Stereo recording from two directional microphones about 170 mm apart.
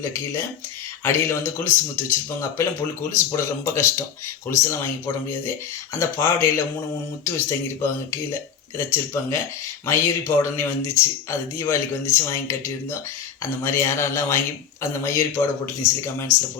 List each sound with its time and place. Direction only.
0.0 s speech: 15° left (ahead or behind)